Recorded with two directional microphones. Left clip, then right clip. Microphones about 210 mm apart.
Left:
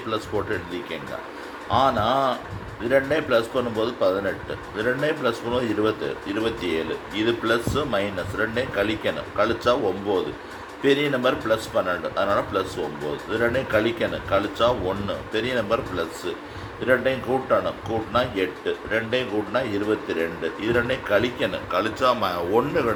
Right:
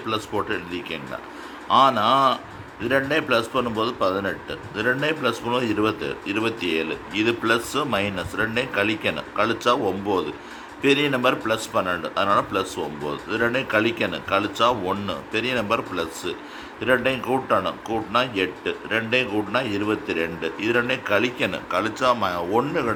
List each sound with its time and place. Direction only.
0.1 s a man's voice: 20° right (ahead or behind)